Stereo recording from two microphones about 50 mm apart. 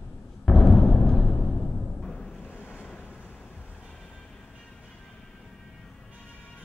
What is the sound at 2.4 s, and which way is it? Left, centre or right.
Waves, left.